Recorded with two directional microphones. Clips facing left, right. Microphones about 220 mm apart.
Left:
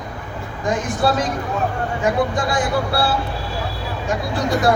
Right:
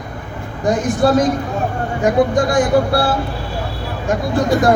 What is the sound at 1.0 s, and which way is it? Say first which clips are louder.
Speech: right 6 dB; 45° right (ahead or behind).